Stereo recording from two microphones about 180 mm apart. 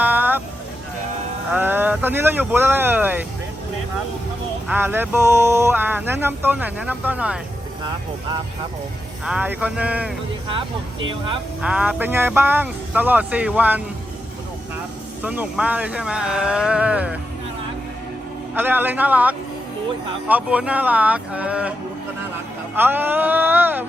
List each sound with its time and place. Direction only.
0.0 s vehicle: 10° right (ahead or behind)
1.5 s speech: 10° right (ahead or behind)
4.7 s speech: 10° right (ahead or behind)
9.2 s speech: 5° right (ahead or behind)
11.0 s speech: 30° right (ahead or behind)
11.6 s speech: 5° right (ahead or behind)
15.2 s speech: 10° right (ahead or behind)
18.5 s speech: 10° right (ahead or behind)
22.7 s speech: 10° right (ahead or behind)